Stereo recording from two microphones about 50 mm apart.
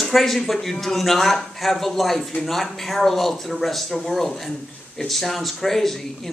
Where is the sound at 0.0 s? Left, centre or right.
Centre.